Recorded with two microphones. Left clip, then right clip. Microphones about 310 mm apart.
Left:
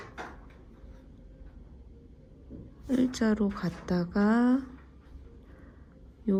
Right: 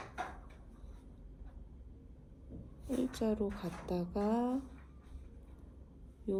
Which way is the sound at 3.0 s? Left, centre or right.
Left.